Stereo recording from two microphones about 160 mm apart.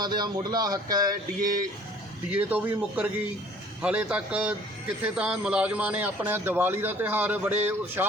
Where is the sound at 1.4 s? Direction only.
60° right (ahead or behind).